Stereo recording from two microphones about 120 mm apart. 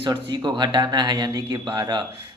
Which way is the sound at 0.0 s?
40° right (ahead or behind).